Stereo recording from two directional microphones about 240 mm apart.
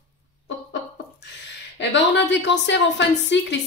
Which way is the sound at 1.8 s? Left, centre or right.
Left.